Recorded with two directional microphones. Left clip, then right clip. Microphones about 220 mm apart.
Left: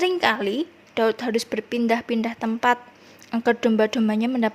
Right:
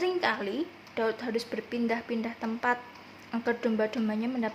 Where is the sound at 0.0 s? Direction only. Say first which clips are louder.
Left 8 dB; 35° left (ahead or behind).